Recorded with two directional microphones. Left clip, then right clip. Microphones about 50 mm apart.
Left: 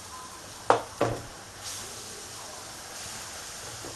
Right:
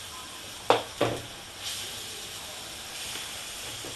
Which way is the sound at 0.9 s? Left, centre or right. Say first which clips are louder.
Even; centre.